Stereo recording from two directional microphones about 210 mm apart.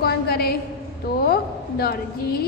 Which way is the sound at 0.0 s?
50° left (ahead or behind).